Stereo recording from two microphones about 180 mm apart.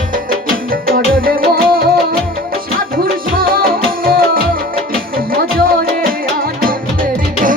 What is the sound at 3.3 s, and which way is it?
Music, 55° right (ahead or behind).